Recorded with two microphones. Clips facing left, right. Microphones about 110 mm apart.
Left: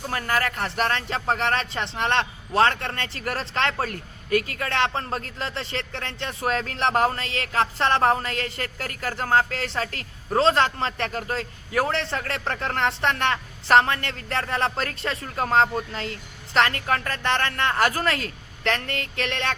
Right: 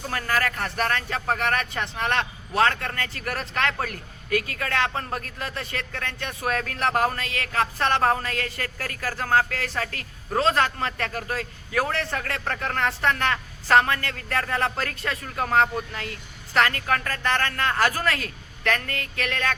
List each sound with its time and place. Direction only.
0.1 s a man's voice: 25° left (ahead or behind)